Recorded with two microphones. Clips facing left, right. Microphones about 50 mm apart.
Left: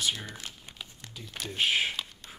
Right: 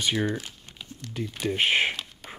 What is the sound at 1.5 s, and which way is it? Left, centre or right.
Speech, right.